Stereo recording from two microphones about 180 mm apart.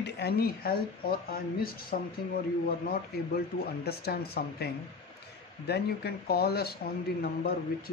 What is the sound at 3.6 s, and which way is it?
Speech, 60° left (ahead or behind).